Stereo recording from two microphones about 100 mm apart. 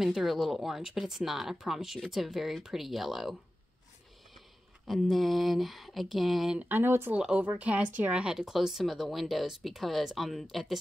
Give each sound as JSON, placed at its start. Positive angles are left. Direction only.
{"t": 0.0, "sound": "speech", "side_deg": -5}
{"t": 4.8, "sound": "speech", "side_deg": 0}
{"t": 6.8, "sound": "speech", "side_deg": -25}
{"t": 7.2, "sound": "speech", "side_deg": -10}